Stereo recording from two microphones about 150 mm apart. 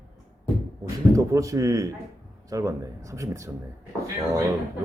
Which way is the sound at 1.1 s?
20° right (ahead or behind).